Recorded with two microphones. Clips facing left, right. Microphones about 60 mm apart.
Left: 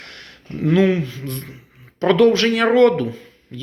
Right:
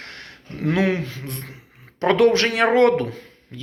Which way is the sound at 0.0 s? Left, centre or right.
Right.